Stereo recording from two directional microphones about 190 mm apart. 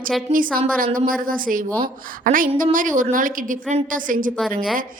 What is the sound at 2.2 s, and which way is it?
A woman's voice, 45° right (ahead or behind).